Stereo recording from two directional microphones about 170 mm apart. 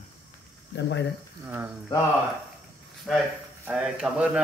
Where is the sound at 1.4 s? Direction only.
10° right (ahead or behind).